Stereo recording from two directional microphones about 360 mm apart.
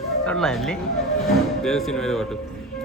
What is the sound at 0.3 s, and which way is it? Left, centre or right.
Music, centre.